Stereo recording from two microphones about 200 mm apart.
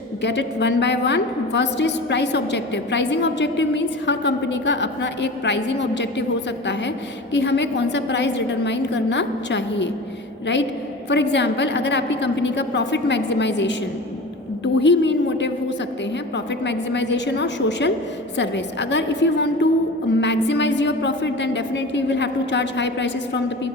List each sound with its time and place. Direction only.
0.2 s a woman's voice: 60° left (ahead or behind)
7.3 s a woman's voice: 60° left (ahead or behind)